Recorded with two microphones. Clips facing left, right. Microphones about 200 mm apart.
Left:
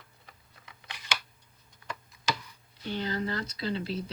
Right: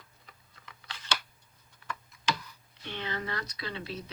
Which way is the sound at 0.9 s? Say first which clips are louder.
Right 1 dB; 15° left (ahead or behind).